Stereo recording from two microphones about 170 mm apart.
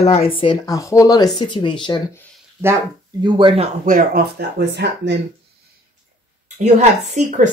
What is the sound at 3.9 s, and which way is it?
Speech, 55° right (ahead or behind).